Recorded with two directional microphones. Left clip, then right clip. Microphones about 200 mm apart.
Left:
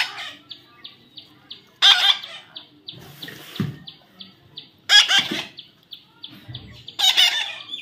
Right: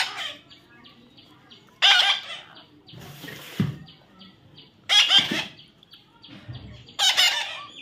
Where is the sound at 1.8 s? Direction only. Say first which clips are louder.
Left 3 dB; 10° left (ahead or behind).